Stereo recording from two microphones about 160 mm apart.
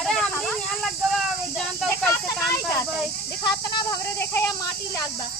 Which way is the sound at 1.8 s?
15° left (ahead or behind).